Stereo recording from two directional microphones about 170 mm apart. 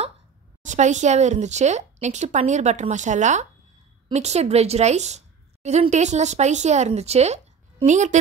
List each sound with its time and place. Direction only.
0.6 s a woman's voice: 45° right (ahead or behind)